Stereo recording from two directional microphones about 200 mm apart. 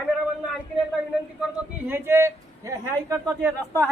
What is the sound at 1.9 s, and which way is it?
A man's voice, 10° right (ahead or behind).